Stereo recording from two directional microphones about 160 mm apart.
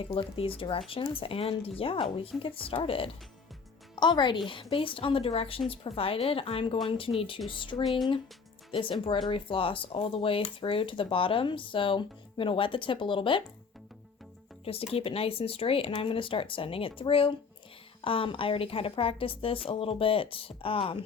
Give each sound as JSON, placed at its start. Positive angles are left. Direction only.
{"t": 0.0, "sound": "speech", "side_deg": 35}
{"t": 7.9, "sound": "speech", "side_deg": 0}
{"t": 8.7, "sound": "speech", "side_deg": 35}
{"t": 14.6, "sound": "speech", "side_deg": 35}